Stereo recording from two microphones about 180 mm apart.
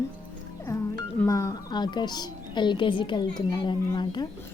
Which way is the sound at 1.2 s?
15° left (ahead or behind).